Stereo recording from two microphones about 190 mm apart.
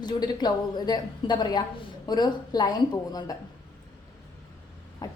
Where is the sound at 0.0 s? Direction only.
20° left (ahead or behind).